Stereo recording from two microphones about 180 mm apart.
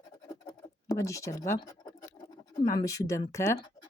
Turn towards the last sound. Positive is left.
turn(degrees=15)  # may be behind; listen again after turning